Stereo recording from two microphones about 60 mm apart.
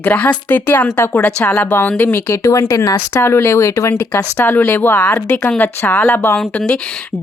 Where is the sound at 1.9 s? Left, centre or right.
Left.